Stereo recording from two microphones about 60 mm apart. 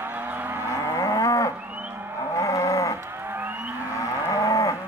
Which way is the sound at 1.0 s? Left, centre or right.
Left.